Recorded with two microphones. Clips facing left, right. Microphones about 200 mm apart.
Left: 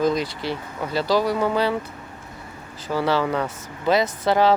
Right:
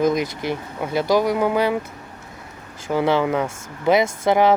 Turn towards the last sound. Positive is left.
turn(degrees=-20)  # may be behind; listen again after turning